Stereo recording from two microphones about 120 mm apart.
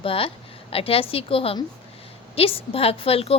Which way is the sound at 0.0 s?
50° left (ahead or behind).